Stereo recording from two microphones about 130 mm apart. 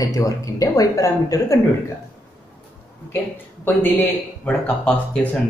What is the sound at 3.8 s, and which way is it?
Speech, 10° left (ahead or behind).